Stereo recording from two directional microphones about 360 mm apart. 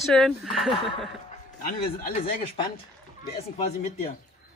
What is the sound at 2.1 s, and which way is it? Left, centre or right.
Speech, centre.